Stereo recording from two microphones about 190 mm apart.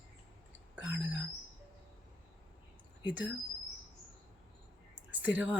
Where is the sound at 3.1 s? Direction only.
10° right (ahead or behind).